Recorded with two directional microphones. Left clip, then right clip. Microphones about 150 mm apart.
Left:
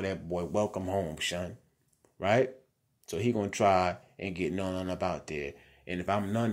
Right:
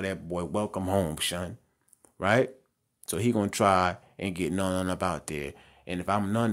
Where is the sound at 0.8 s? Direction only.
50° right (ahead or behind).